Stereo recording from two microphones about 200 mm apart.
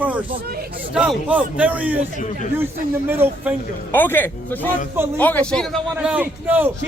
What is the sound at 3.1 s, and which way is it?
Speech, 10° right (ahead or behind).